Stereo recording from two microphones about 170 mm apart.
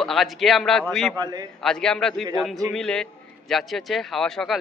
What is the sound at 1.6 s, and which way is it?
A man's voice, 5° left (ahead or behind).